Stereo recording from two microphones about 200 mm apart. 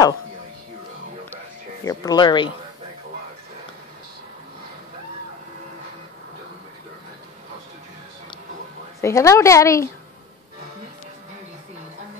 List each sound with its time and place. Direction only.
1.9 s speech: 20° left (ahead or behind)
9.0 s a woman's voice: 15° left (ahead or behind)